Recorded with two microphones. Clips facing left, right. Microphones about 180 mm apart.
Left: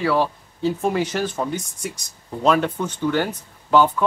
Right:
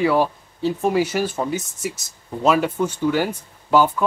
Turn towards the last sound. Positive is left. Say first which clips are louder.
# even
turn(degrees=-10)  # may be behind; listen again after turning